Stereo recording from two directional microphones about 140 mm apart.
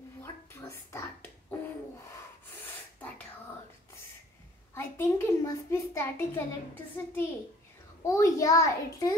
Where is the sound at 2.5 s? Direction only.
15° left (ahead or behind).